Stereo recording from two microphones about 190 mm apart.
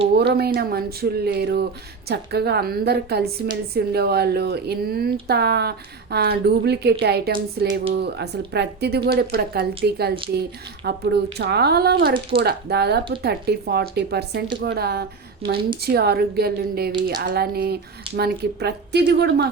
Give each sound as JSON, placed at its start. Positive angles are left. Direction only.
{"t": 0.2, "sound": "speech", "side_deg": -55}